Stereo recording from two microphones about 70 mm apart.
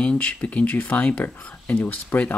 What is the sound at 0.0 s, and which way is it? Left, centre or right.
Speech, centre.